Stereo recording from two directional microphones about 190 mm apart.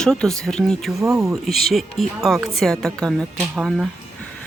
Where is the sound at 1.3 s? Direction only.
Centre (ahead or behind).